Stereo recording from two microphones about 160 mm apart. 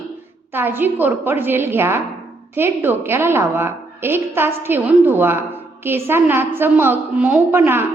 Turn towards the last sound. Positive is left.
turn(degrees=-15)  # may be behind; listen again after turning